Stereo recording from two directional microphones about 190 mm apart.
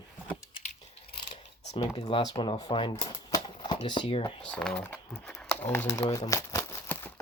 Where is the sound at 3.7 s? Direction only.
25° left (ahead or behind).